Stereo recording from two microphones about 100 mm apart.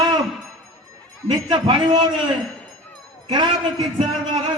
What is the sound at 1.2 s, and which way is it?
Speech, 55° right (ahead or behind).